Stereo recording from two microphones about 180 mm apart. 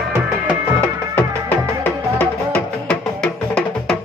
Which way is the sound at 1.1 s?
10° left (ahead or behind).